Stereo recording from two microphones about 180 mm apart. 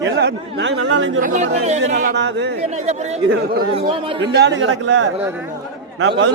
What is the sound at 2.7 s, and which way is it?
Speech, 40° right (ahead or behind).